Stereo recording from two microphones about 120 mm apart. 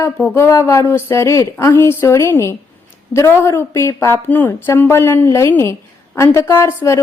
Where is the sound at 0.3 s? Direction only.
20° left (ahead or behind).